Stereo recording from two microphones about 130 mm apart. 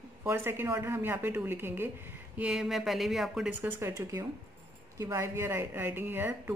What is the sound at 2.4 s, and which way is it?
A woman's voice, 5° right (ahead or behind).